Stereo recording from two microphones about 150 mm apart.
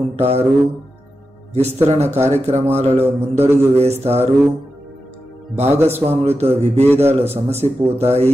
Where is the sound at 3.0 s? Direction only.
15° right (ahead or behind).